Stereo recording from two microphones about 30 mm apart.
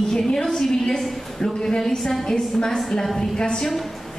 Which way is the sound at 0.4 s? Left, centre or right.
Centre.